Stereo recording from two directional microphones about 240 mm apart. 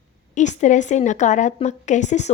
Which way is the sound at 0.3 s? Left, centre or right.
Left.